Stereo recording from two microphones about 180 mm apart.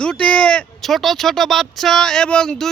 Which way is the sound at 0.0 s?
5° left (ahead or behind).